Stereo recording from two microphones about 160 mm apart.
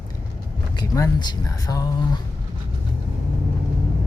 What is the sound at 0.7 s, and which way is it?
Speech, 25° left (ahead or behind).